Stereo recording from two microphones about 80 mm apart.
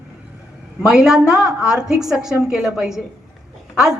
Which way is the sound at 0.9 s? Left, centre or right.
Centre.